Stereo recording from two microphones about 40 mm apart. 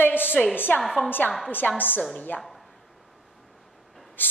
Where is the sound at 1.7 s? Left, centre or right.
Left.